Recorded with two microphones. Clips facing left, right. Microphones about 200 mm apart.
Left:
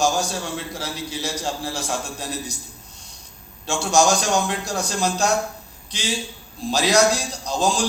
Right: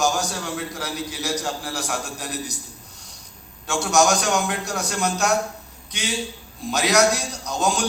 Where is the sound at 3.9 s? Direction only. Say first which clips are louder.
Left 1 dB; 30° left (ahead or behind).